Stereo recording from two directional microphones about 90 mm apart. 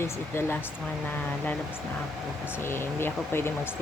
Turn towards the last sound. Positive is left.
turn(degrees=25)  # may be behind; listen again after turning